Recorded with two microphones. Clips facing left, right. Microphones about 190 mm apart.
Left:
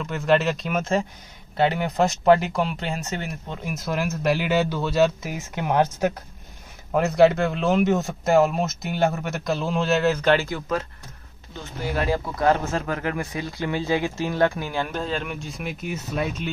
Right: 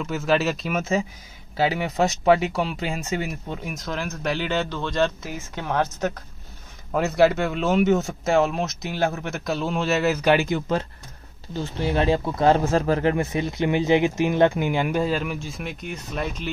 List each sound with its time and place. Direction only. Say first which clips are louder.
0.0 s speech: left 1 dB; centre (ahead or behind)
3.6 s speech: left 6 dB; 5° left (ahead or behind)
6.9 s speech: left 2 dB; centre (ahead or behind)